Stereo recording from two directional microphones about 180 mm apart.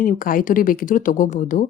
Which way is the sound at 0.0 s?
50° left (ahead or behind).